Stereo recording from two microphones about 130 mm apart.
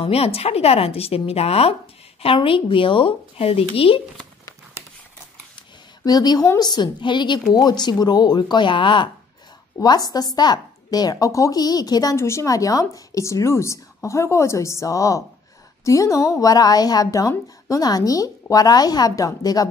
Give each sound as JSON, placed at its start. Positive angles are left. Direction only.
{"t": 0.0, "sound": "a woman's voice", "side_deg": 50}
{"t": 5.6, "sound": "a woman's voice", "side_deg": 30}